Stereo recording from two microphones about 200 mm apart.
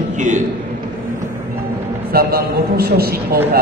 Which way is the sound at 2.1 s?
50° right (ahead or behind).